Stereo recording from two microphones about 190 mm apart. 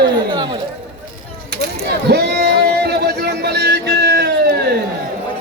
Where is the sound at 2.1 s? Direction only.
60° right (ahead or behind).